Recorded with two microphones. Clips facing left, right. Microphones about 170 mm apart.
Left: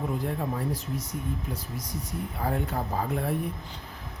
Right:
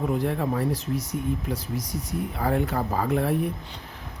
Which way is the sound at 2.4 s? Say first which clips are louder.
Right 5 dB; 80° right.